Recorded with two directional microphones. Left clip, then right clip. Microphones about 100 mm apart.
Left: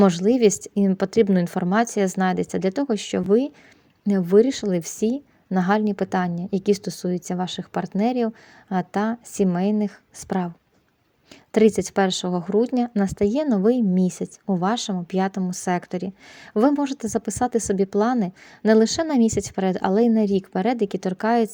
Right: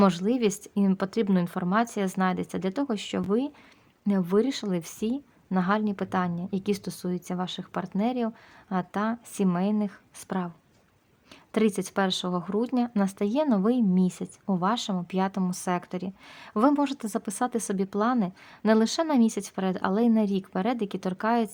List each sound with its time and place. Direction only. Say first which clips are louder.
0.0 s a woman's voice: left 7 dB; 30° left (ahead or behind)
11.5 s a woman's voice: left 8 dB; 30° left (ahead or behind)